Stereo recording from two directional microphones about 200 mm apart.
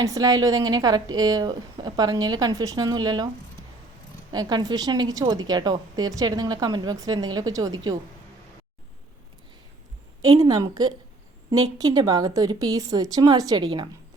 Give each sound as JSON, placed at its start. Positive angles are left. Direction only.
{"t": 0.0, "sound": "a woman's voice", "side_deg": -15}
{"t": 4.3, "sound": "a woman's voice", "side_deg": -20}
{"t": 10.4, "sound": "a woman's voice", "side_deg": -15}